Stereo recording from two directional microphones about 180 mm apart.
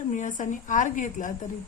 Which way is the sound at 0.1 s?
45° left (ahead or behind).